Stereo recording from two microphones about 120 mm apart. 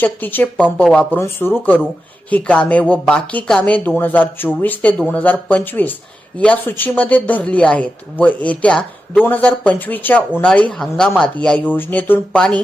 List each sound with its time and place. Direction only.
0.0 s speech: 15° left (ahead or behind)
0.5 s speech: 5° left (ahead or behind)
1.2 s speech: 20° left (ahead or behind)